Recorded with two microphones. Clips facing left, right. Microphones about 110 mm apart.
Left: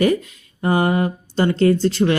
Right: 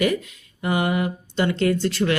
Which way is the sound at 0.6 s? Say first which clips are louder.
Left 4 dB; 40° left (ahead or behind).